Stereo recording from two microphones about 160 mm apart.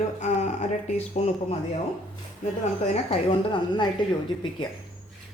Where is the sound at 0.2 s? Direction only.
45° left (ahead or behind).